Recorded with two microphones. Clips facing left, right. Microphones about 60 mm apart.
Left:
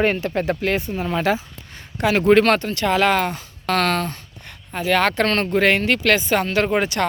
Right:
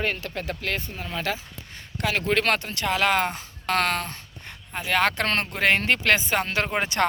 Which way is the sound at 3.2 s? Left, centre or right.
Centre.